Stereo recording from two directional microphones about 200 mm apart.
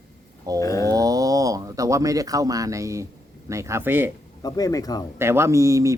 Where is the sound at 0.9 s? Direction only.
15° right (ahead or behind).